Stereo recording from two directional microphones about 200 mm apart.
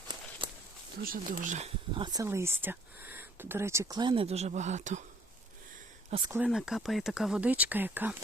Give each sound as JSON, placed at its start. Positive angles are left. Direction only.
{"t": 1.0, "sound": "speech", "side_deg": -45}
{"t": 2.0, "sound": "speech", "side_deg": -15}
{"t": 6.1, "sound": "speech", "side_deg": -25}
{"t": 6.3, "sound": "speech", "side_deg": -5}